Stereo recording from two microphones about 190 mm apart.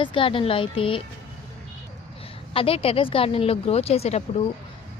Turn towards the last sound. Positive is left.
turn(degrees=35)  # may be behind; listen again after turning